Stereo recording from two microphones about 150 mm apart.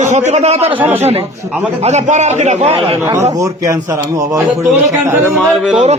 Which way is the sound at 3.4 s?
20° right (ahead or behind).